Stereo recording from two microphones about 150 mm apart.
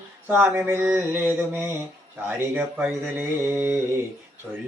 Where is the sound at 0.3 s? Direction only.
15° right (ahead or behind).